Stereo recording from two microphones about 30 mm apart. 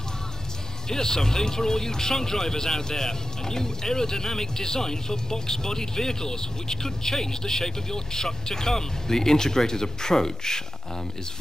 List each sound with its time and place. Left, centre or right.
0.8 s speech: centre